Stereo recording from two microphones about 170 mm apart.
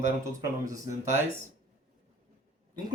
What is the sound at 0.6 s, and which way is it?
Speech, 20° right (ahead or behind).